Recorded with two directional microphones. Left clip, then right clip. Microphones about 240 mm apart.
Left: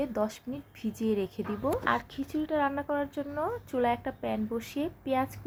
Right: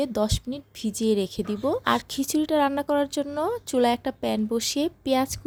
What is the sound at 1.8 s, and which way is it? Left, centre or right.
Speech, right.